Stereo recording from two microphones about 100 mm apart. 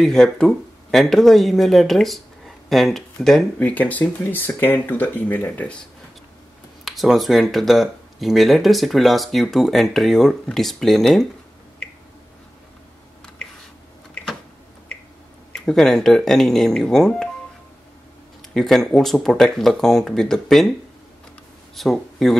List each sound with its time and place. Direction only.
0.0 s speech: 5° left (ahead or behind)
3.5 s speech: 15° left (ahead or behind)
6.8 s speech: centre (ahead or behind)
15.5 s speech: 5° left (ahead or behind)
18.5 s speech: 5° left (ahead or behind)
21.7 s speech: centre (ahead or behind)